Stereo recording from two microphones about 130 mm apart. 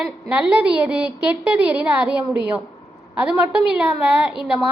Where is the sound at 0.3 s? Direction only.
10° right (ahead or behind).